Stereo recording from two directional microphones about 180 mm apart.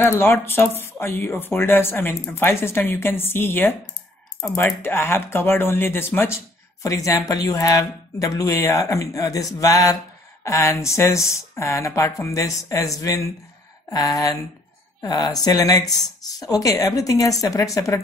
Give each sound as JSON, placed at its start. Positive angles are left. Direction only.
{"t": 0.0, "sound": "speech", "side_deg": 10}